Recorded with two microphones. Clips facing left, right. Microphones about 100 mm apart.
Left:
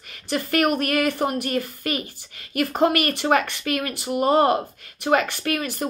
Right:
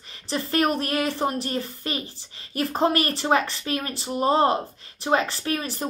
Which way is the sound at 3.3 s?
60° left (ahead or behind).